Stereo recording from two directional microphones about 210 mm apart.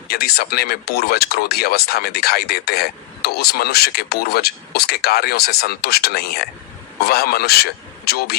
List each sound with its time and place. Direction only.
0.1 s speech: 50° left (ahead or behind)